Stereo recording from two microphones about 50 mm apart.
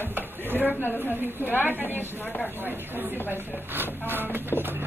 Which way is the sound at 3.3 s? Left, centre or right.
Right.